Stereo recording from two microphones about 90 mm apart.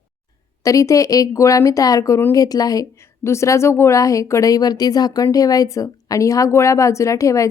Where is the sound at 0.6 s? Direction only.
35° left (ahead or behind).